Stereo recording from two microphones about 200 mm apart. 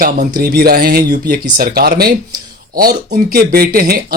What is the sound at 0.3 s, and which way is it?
Speech, 50° right (ahead or behind).